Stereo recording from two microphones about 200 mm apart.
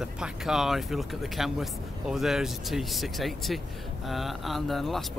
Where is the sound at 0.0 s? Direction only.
Centre (ahead or behind).